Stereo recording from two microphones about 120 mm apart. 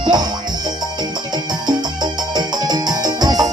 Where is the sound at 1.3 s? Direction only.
35° right (ahead or behind).